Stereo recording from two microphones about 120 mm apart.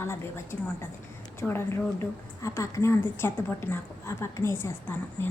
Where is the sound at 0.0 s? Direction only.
20° left (ahead or behind).